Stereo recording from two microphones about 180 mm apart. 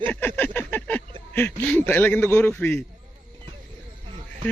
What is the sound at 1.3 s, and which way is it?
Speech, 10° left (ahead or behind).